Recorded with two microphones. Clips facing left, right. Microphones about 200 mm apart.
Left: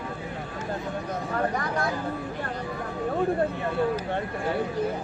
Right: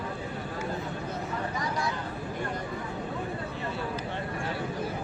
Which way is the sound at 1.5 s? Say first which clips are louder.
Left 4 dB; 60° left (ahead or behind).